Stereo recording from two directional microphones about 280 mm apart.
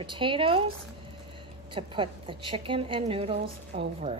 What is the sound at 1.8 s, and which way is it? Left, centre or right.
A woman's voice, centre.